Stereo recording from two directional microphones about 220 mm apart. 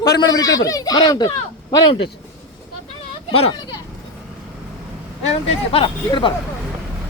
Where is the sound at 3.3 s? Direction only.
25° left (ahead or behind).